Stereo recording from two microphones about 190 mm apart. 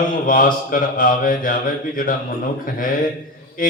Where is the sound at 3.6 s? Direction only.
45° left (ahead or behind).